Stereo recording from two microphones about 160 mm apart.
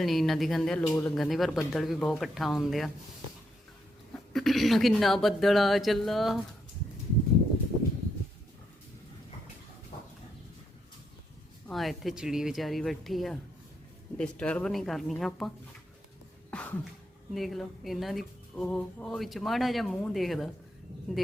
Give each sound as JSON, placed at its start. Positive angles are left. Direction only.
{"t": 0.0, "sound": "speech", "side_deg": 0}
{"t": 0.9, "sound": "speech", "side_deg": 15}
{"t": 1.1, "sound": "speech", "side_deg": 0}
{"t": 4.3, "sound": "speech", "side_deg": 0}
{"t": 9.9, "sound": "a sound", "side_deg": 50}
{"t": 11.7, "sound": "speech", "side_deg": 0}
{"t": 16.5, "sound": "a sound", "side_deg": 10}
{"t": 17.3, "sound": "speech", "side_deg": 0}